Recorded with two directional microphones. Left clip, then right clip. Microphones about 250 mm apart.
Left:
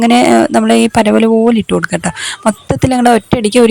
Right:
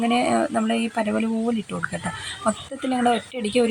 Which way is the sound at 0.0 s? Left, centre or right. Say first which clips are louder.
Left 12 dB; left.